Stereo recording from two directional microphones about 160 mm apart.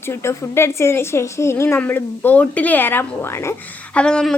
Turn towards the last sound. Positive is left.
turn(degrees=5)  # may be behind; listen again after turning